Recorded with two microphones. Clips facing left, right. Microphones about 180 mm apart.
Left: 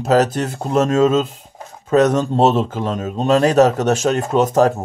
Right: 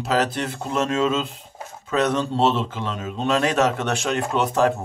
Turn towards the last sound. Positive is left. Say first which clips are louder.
# left 6 dB
turn(degrees=40)  # may be behind; listen again after turning